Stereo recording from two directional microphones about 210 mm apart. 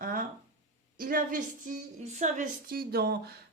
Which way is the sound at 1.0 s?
40° right (ahead or behind).